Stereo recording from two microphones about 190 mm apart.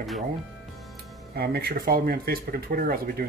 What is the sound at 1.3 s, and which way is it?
Speech, 55° right (ahead or behind).